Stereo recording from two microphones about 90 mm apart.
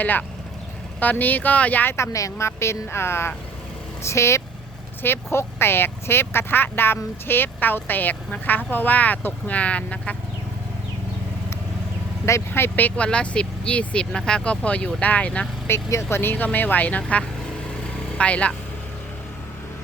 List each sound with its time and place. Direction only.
0.0 s speech: 20° left (ahead or behind)
2.1 s speech: 35° left (ahead or behind); by 10.2 s 15° left (ahead or behind)
12.2 s speech: 30° left (ahead or behind)
15.6 s speech: 30° left (ahead or behind); by 18.5 s 15° left (ahead or behind)